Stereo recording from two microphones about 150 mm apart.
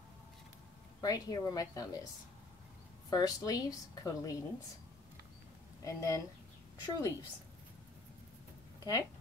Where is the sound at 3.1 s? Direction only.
25° left (ahead or behind).